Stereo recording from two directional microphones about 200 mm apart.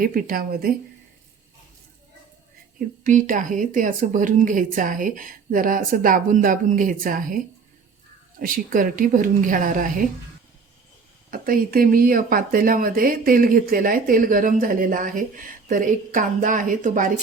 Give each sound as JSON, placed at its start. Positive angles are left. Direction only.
{"t": 0.0, "sound": "speech", "side_deg": -45}
{"t": 3.0, "sound": "speech", "side_deg": -40}
{"t": 11.3, "sound": "speech", "side_deg": -45}